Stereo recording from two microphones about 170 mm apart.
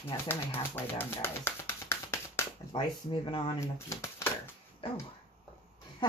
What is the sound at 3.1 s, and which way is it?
Speech, 30° left (ahead or behind).